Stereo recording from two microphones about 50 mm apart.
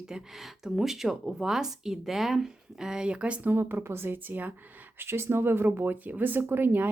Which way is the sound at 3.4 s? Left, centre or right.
Right.